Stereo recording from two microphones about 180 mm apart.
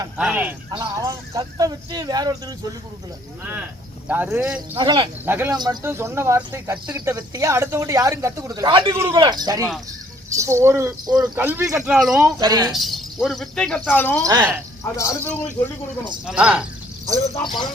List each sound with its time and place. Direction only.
0.2 s speech: 10° right (ahead or behind)
0.7 s a man's voice: 20° right (ahead or behind)
4.1 s speech: 10° right (ahead or behind)
4.7 s a man's voice: 25° right (ahead or behind)
5.2 s a man's voice: 10° right (ahead or behind)
11.8 s speech: centre (ahead or behind)
12.2 s a man's voice: 25° right (ahead or behind)
12.7 s a man's voice: centre (ahead or behind); by 15.3 s 15° left (ahead or behind)
16.0 s speech: 5° right (ahead or behind)
17.2 s speech: 20° left (ahead or behind)